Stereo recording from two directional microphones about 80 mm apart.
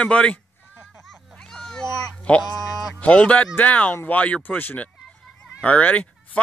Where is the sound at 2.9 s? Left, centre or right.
Centre.